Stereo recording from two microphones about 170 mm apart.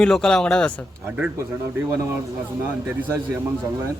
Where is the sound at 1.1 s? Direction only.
10° right (ahead or behind).